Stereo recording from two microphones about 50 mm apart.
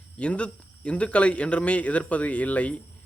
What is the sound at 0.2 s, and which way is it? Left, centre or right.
A man's voice, left.